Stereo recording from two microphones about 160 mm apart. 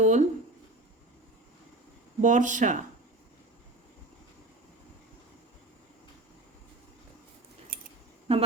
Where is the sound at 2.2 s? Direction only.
50° right (ahead or behind).